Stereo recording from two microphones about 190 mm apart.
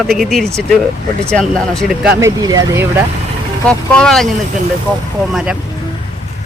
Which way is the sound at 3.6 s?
5° left (ahead or behind).